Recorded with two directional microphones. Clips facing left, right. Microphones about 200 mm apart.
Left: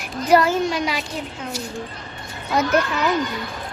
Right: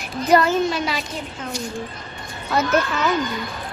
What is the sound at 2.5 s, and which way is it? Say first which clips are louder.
Speech: even; 15° left (ahead or behind).